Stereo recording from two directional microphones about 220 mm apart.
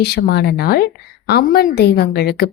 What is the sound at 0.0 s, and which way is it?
A woman's voice, 45° left (ahead or behind).